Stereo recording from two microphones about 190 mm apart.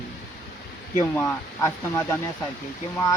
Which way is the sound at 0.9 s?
15° left (ahead or behind).